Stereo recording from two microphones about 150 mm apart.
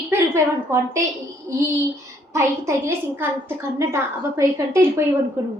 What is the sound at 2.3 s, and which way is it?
A woman's voice, 20° right (ahead or behind).